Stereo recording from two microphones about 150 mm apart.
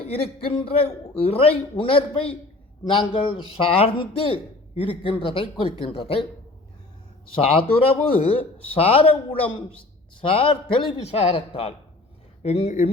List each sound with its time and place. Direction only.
0.0 s a man's voice: 40° left (ahead or behind)
7.3 s a man's voice: 35° left (ahead or behind)